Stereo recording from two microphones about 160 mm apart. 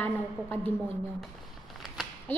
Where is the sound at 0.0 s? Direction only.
10° left (ahead or behind).